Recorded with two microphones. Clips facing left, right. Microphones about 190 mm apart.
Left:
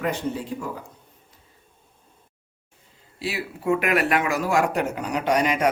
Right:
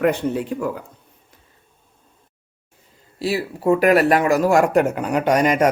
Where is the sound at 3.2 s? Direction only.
40° right (ahead or behind).